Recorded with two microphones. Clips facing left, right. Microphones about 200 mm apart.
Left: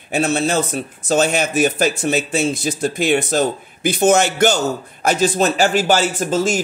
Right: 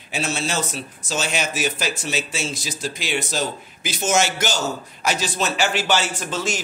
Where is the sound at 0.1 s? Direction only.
55° left (ahead or behind).